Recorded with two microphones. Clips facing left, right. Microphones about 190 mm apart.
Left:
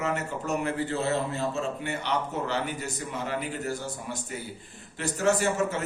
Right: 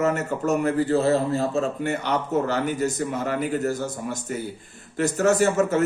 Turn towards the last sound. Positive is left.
turn(degrees=-45)  # may be behind; listen again after turning